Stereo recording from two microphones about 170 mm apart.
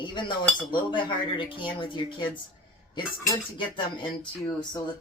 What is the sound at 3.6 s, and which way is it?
Speech, 30° left (ahead or behind).